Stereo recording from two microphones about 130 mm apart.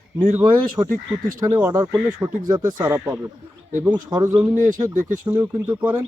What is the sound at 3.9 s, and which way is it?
Speech, 30° right (ahead or behind).